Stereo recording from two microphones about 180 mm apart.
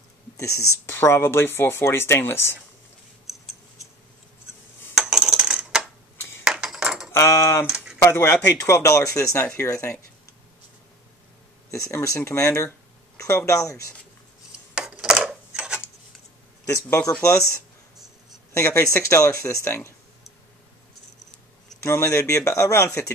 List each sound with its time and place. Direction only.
0.7 s speech: 15° left (ahead or behind)
4.9 s a sound: 5° right (ahead or behind)
7.1 s typing: 15° left (ahead or behind)
7.7 s a sound: 5° right (ahead or behind)
8.0 s speech: 15° left (ahead or behind)
11.9 s speech: 15° left (ahead or behind)
14.7 s a sound: 5° right (ahead or behind)
16.6 s speech: 15° left (ahead or behind)
21.8 s speech: 15° left (ahead or behind)